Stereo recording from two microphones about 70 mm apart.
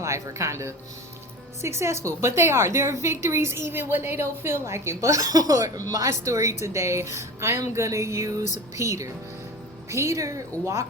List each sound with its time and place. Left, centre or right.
0.0 s a woman's voice: right